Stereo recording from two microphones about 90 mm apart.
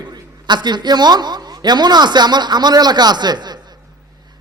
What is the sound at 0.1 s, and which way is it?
A man's voice, 55° right (ahead or behind).